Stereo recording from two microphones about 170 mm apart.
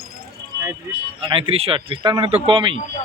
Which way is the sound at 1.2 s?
30° right (ahead or behind).